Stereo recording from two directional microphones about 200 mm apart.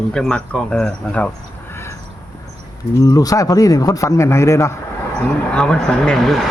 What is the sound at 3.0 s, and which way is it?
A man's voice, 20° left (ahead or behind).